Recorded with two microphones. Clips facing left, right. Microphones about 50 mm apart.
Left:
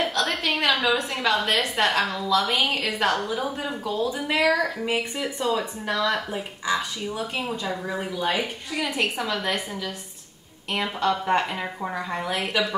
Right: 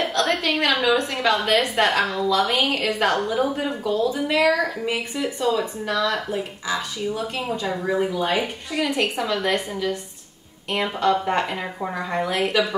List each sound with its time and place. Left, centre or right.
0.0 s a sound: centre
1.5 s a woman's voice: centre
7.8 s speech: centre
8.7 s a woman's voice: centre